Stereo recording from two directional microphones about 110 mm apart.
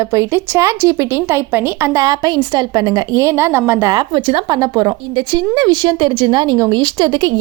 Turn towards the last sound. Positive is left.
turn(degrees=-40)  # may be behind; listen again after turning